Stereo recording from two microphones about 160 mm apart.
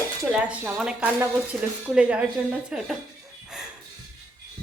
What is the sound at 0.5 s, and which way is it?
Speech, 10° right (ahead or behind).